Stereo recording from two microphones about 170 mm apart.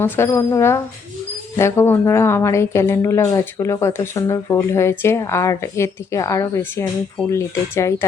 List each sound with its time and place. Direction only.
0.0 s speech: 15° left (ahead or behind)